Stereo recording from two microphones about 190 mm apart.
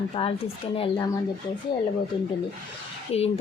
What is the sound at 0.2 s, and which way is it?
Speech, 25° left (ahead or behind).